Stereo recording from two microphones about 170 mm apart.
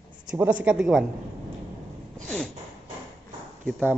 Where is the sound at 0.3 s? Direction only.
10° right (ahead or behind).